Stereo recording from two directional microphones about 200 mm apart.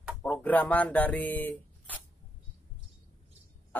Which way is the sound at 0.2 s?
5° left (ahead or behind).